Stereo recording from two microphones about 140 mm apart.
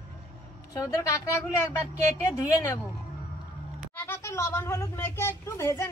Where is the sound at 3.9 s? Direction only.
15° left (ahead or behind).